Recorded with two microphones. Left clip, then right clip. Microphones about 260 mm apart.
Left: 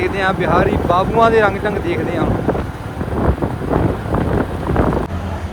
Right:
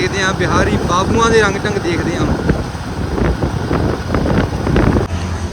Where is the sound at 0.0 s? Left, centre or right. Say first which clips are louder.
Right 1 dB; centre.